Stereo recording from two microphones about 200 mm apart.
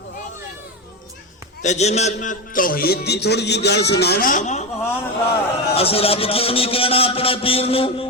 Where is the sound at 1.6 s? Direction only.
35° left (ahead or behind).